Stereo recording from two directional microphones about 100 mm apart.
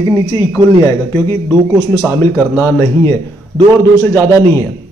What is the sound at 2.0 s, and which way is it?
Speech, 20° left (ahead or behind).